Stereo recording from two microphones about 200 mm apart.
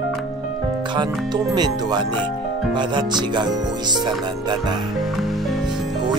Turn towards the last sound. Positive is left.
turn(degrees=0)  # may be behind; listen again after turning